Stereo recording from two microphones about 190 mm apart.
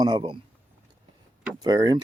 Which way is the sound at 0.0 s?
25° right (ahead or behind).